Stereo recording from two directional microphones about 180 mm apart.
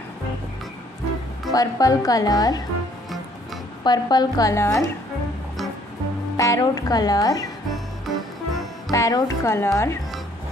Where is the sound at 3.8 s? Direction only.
25° left (ahead or behind).